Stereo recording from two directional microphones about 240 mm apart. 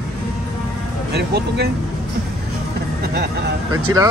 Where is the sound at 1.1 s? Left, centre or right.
Right.